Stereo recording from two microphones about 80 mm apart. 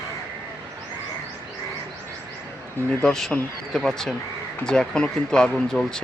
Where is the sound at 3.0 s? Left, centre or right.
Centre.